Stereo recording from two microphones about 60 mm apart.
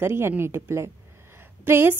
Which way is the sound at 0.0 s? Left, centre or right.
Right.